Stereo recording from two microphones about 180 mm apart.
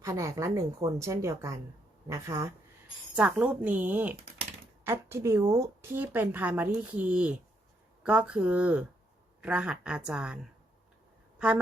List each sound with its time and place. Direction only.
0.0 s a woman's voice: 15° right (ahead or behind)